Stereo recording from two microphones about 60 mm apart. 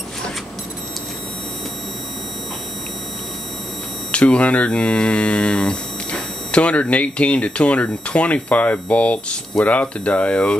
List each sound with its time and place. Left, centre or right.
4.1 s mantra: centre